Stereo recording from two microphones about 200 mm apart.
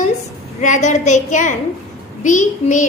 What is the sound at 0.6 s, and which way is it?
A woman's voice, 40° left (ahead or behind).